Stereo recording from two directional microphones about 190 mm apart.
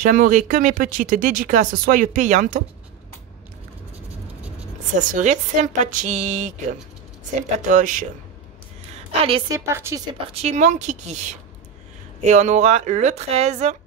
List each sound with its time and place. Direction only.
0.0 s speech: 45° right (ahead or behind)
5.1 s speech: 40° right (ahead or behind)
7.5 s speech: 45° right (ahead or behind)
8.9 s a sound: 30° right (ahead or behind)
9.5 s speech: 15° right (ahead or behind); by 13.7 s 35° right (ahead or behind)